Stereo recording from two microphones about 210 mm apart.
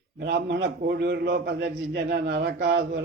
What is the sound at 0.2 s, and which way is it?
A man's voice, 55° right (ahead or behind).